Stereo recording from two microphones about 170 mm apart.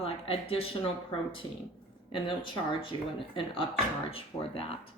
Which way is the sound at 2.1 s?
30° left (ahead or behind).